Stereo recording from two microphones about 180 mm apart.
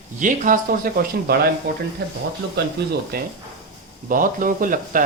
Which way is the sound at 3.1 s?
60° right (ahead or behind).